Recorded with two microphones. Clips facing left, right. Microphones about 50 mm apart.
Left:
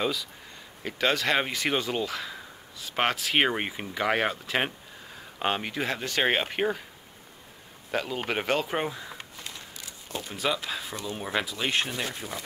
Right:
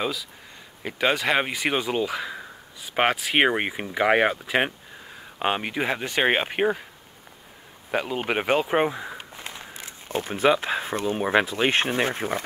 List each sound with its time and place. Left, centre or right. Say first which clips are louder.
0.0 s speech: right 1 dB; centre
0.8 s speech: right 3 dB; centre
7.9 s speech: right 4 dB; centre; by 12.4 s right